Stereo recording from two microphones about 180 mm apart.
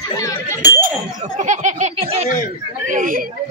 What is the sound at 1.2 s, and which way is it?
Speech, 45° right (ahead or behind).